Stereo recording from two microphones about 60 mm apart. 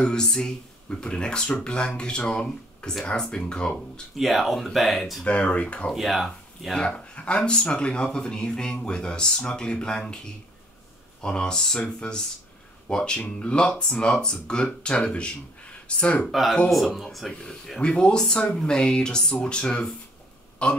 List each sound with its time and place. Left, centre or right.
0.0 s speech: centre
4.2 s speech: centre
5.2 s speech: left
5.9 s speech: centre
11.2 s speech: centre
16.3 s speech: centre
17.3 s speech: centre